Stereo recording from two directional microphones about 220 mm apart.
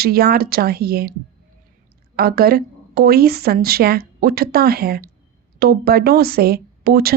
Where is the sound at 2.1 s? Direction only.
45° right (ahead or behind).